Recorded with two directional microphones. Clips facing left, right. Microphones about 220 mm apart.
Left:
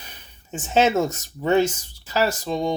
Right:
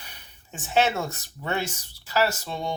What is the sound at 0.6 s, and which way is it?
Speech, 20° left (ahead or behind).